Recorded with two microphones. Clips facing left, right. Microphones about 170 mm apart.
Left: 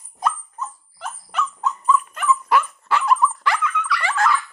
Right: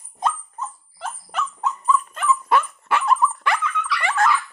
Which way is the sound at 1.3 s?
40° right (ahead or behind).